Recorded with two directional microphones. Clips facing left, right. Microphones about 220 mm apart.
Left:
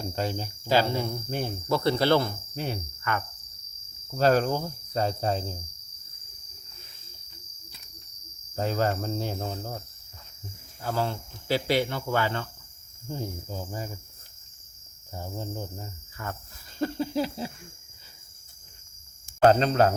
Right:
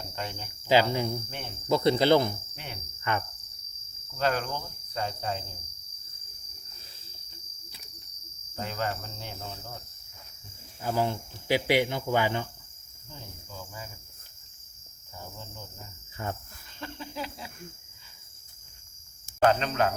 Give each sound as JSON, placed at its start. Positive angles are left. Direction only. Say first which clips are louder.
{"t": 0.2, "sound": "cricket", "louder": "left 7 dB", "side_deg": 35}
{"t": 0.7, "sound": "speech", "louder": "right 1 dB", "side_deg": -15}
{"t": 1.3, "sound": "cricket", "louder": "left 10 dB", "side_deg": 40}
{"t": 1.6, "sound": "speech", "louder": "right 2 dB", "side_deg": -20}
{"t": 3.0, "sound": "cricket", "louder": "right 2 dB", "side_deg": -20}
{"t": 4.2, "sound": "cricket", "louder": "left 7 dB", "side_deg": 35}
{"t": 8.5, "sound": "cricket", "louder": "left 6 dB", "side_deg": 40}
{"t": 10.8, "sound": "speech", "louder": "right 1 dB", "side_deg": -15}
{"t": 13.1, "sound": "cricket", "louder": "left 12 dB", "side_deg": 40}
{"t": 15.1, "sound": "cricket", "louder": "left 9 dB", "side_deg": 40}
{"t": 16.2, "sound": "cricket", "louder": "right 2 dB", "side_deg": -20}
{"t": 16.7, "sound": "cricket", "louder": "left 11 dB", "side_deg": 40}
{"t": 19.5, "sound": "cricket", "louder": "left 5 dB", "side_deg": 35}